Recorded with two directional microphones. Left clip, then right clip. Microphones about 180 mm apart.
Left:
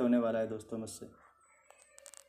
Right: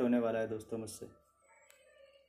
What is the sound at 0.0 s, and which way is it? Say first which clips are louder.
Speech: left 2 dB; 15° left (ahead or behind).